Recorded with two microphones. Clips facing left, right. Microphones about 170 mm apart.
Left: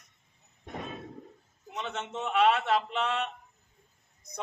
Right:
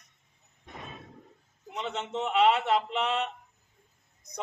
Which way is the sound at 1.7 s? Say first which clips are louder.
Right 3 dB; 15° right (ahead or behind).